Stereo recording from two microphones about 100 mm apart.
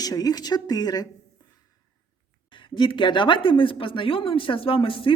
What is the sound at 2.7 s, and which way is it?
A woman's voice, 55° left (ahead or behind).